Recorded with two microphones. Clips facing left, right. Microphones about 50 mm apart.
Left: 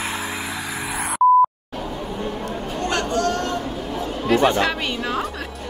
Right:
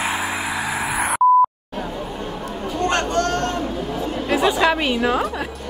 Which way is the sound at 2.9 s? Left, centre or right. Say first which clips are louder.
Right 1 dB; right.